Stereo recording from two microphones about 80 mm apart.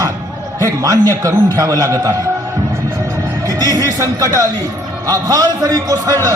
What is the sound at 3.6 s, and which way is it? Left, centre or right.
A man's voice, right.